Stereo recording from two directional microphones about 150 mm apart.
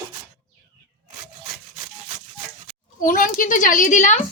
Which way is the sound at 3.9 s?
55° left (ahead or behind).